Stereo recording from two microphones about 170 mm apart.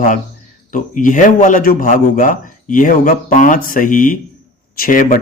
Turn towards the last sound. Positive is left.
turn(degrees=50)  # may be behind; listen again after turning